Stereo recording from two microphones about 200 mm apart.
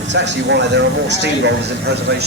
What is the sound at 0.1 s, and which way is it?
Speech, 60° right (ahead or behind).